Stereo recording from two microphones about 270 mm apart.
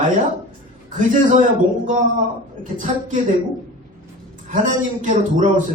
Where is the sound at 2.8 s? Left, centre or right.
Right.